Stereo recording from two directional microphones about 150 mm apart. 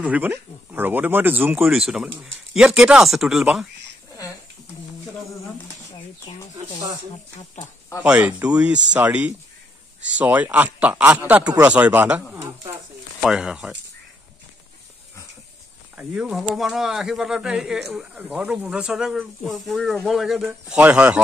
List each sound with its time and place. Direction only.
0.0 s speech: 10° right (ahead or behind)
6.3 s speech: 35° left (ahead or behind)
8.0 s speech: 10° right (ahead or behind)
13.2 s speech: 5° right (ahead or behind)
16.0 s speech: 10° right (ahead or behind)